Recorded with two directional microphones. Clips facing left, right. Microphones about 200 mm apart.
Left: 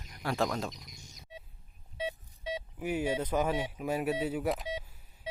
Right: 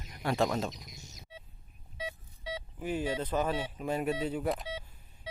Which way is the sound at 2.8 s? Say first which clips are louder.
Left 1 dB; 10° left (ahead or behind).